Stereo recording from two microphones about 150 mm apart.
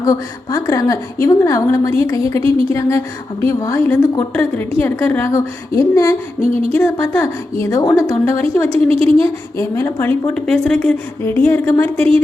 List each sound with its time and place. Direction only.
0.0 s a woman's voice: 25° left (ahead or behind)
8.7 s a woman's voice: 40° right (ahead or behind)
9.2 s a woman's voice: 20° left (ahead or behind)